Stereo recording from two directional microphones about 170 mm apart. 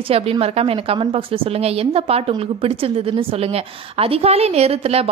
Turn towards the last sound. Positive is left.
turn(degrees=-35)  # may be behind; listen again after turning